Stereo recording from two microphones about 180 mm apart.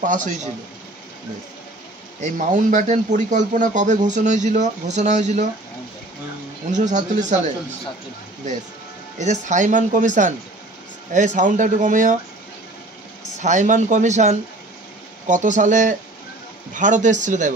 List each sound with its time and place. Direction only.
0.0 s speech: 45° right (ahead or behind)
2.1 s speech: 40° right (ahead or behind)
6.7 s speech: 40° right (ahead or behind)
9.2 s speech: 40° right (ahead or behind)
13.4 s speech: 40° right (ahead or behind)